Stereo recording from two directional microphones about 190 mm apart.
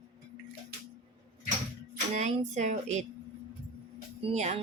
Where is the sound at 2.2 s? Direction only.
35° right (ahead or behind).